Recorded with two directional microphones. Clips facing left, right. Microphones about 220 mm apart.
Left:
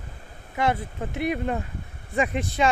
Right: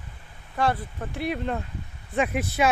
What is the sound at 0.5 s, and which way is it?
Speech, 20° left (ahead or behind).